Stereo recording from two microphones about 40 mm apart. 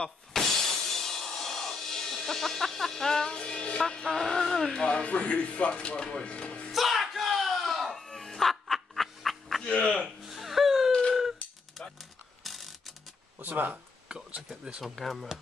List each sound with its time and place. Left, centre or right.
0.3 s music: centre
4.9 s speech: left
6.7 s a sound: centre
9.6 s speech: left
10.2 s music: centre
10.9 s a sound: left
12.4 s ratchet: centre
13.4 s speech: right
14.5 s speech: right
15.0 s speech: centre